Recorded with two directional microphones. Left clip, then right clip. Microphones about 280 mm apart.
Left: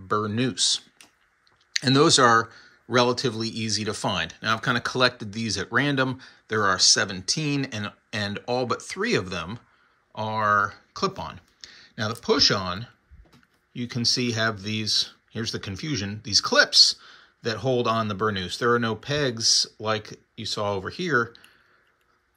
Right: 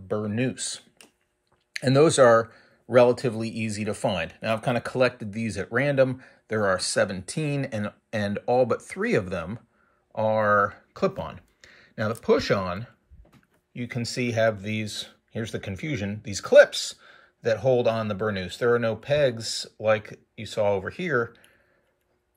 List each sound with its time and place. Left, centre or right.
0.1 s speech: left
0.4 s speech: centre
3.3 s speech: left
3.7 s speech: centre
4.3 s speech: left
4.6 s speech: centre